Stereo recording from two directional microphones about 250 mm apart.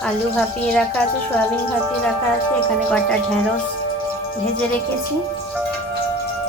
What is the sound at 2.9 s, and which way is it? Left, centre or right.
Speech, centre.